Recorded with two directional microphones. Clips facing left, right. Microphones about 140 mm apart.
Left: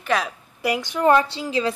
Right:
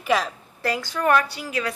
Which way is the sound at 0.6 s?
15° left (ahead or behind).